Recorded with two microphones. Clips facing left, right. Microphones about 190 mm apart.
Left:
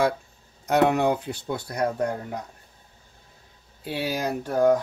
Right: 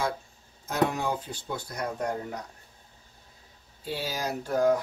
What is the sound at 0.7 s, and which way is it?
Speech, 65° left (ahead or behind).